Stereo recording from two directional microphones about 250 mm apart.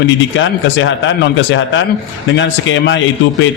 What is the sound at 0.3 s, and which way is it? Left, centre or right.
A man's voice, left.